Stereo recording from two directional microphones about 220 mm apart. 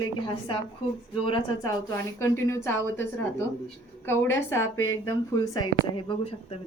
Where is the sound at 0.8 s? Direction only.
25° left (ahead or behind).